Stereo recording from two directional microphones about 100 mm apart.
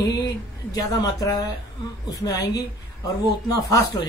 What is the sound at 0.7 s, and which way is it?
Speech, 40° left (ahead or behind).